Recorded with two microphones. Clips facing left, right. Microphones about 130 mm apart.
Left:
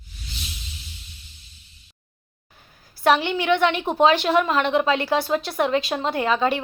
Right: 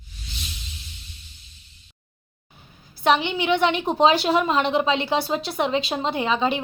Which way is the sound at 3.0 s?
15° right (ahead or behind).